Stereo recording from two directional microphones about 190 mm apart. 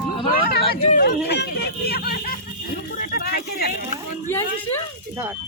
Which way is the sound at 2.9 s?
45° left (ahead or behind).